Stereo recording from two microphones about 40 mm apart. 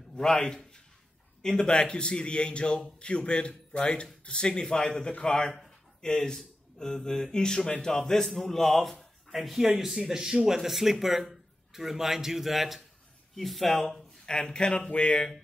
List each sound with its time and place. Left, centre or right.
0.1 s a man's voice: centre
5.1 s a man's voice: left; by 14.0 s centre
14.2 s a man's voice: centre